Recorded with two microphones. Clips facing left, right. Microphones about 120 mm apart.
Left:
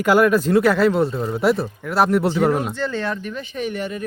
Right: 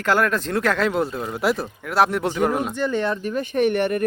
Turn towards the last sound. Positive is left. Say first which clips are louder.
# right 6 dB
turn(degrees=-65)  # may be behind; listen again after turning